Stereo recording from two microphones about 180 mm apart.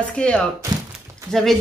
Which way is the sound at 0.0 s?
5° left (ahead or behind).